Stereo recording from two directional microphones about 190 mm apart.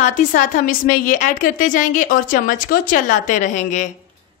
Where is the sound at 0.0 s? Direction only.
40° left (ahead or behind).